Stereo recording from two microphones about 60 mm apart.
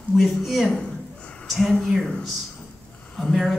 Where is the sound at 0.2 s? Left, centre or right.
Centre.